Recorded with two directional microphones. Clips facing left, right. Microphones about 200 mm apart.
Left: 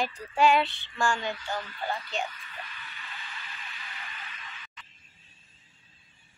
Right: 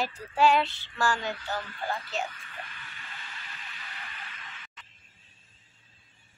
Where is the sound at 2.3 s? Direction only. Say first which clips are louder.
Even; 50° right (ahead or behind).